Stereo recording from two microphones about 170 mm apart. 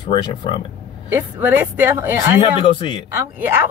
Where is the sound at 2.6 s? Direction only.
30° left (ahead or behind).